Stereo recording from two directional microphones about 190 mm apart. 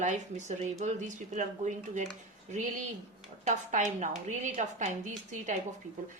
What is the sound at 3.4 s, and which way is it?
Speech, 40° right (ahead or behind).